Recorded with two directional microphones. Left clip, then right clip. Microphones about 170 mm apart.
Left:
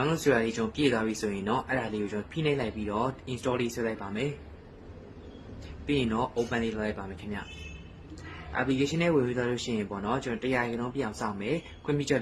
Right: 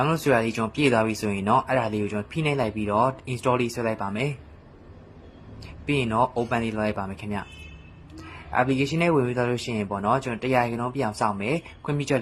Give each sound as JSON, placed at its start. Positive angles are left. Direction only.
{"t": 0.1, "sound": "speech", "side_deg": -25}
{"t": 5.8, "sound": "speech", "side_deg": -30}
{"t": 8.5, "sound": "speech", "side_deg": -30}